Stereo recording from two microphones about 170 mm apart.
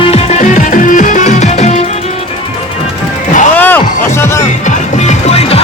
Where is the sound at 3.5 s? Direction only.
10° left (ahead or behind).